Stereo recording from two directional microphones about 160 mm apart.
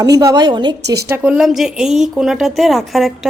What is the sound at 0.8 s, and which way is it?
Speech, 90° right.